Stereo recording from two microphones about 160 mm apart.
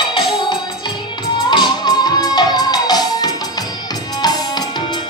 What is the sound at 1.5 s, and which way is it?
Music, 25° left (ahead or behind).